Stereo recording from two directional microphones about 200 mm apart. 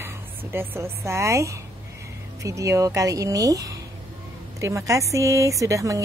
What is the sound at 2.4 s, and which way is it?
Speech, 15° right (ahead or behind).